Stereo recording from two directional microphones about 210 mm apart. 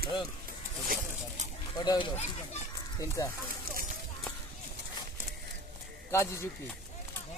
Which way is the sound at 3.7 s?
45° right (ahead or behind).